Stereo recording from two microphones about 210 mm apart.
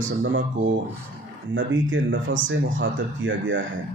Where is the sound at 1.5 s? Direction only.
65° right (ahead or behind).